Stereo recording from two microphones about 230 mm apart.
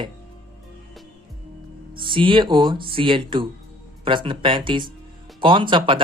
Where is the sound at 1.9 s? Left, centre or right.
Right.